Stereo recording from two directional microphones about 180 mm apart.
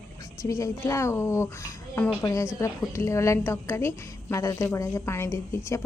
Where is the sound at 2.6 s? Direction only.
15° left (ahead or behind).